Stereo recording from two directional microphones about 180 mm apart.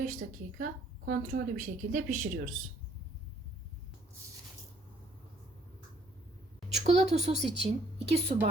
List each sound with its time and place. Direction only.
0.0 s a woman's voice: 50° right (ahead or behind)
6.7 s a woman's voice: 35° right (ahead or behind)